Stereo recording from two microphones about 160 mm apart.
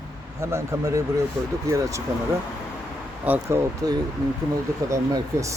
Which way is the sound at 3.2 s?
15° right (ahead or behind).